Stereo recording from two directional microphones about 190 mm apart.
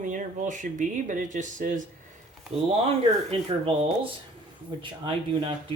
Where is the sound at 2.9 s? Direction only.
30° right (ahead or behind).